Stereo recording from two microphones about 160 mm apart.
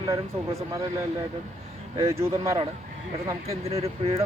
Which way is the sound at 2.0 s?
20° right (ahead or behind).